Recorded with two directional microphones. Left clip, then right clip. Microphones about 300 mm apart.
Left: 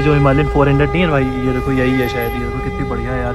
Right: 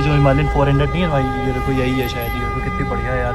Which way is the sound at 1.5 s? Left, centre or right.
Centre.